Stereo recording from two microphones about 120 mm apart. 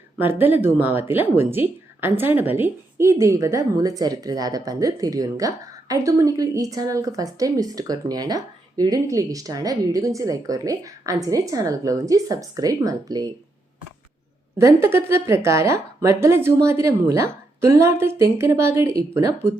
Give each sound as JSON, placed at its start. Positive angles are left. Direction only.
{"t": 0.4, "sound": "a woman's voice", "side_deg": -15}
{"t": 14.6, "sound": "a woman's voice", "side_deg": -25}